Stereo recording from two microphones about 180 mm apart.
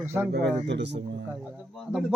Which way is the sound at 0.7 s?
75° right (ahead or behind).